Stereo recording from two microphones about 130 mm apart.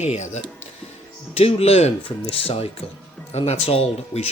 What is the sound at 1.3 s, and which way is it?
Speech, 50° left (ahead or behind).